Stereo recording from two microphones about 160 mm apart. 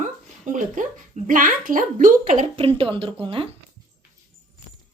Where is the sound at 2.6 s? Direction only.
35° right (ahead or behind).